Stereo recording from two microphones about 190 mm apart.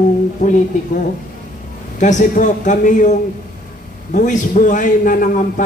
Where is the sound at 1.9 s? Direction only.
40° left (ahead or behind).